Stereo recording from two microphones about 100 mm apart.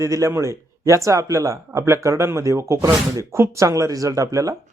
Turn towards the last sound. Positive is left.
turn(degrees=-35)  # may be behind; listen again after turning